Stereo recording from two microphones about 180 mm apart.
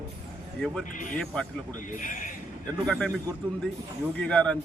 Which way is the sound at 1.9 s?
45° left (ahead or behind).